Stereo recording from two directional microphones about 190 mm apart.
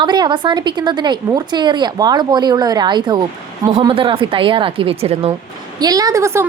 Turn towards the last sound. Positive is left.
turn(degrees=-15)  # may be behind; listen again after turning